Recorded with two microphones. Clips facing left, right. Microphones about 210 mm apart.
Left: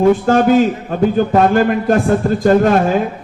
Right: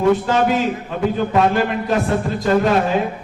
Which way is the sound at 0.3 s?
50° left (ahead or behind).